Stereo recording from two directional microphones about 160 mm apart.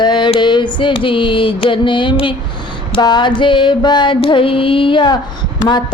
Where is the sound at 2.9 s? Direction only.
30° left (ahead or behind).